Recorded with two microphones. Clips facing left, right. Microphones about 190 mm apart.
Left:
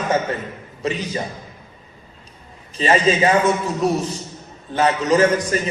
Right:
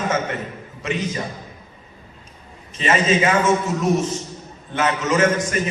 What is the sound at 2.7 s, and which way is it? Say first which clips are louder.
A man's voice: left 2 dB; 35° left (ahead or behind).